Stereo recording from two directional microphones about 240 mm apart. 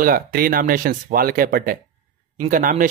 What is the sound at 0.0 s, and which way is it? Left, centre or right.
A man's voice, right.